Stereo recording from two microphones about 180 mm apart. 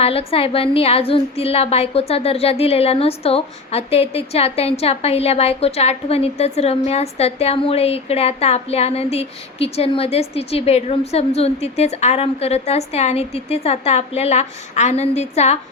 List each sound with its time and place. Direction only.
0.0 s a woman's voice: 35° left (ahead or behind)